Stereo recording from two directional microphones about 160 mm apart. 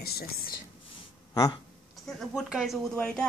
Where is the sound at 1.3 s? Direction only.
25° left (ahead or behind).